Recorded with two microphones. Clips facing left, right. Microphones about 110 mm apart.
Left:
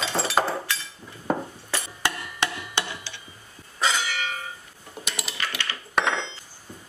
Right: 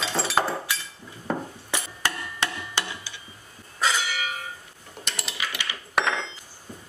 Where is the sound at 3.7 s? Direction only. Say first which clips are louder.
Even; centre (ahead or behind).